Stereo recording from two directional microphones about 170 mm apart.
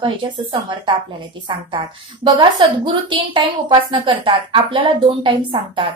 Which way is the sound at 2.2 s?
25° right (ahead or behind).